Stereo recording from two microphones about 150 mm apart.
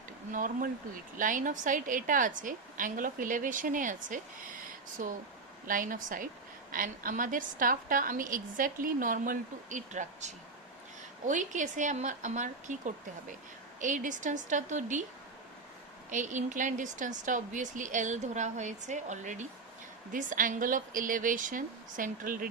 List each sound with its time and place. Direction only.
0.3 s a woman's voice: 65° right (ahead or behind)
16.0 s a woman's voice: 60° right (ahead or behind)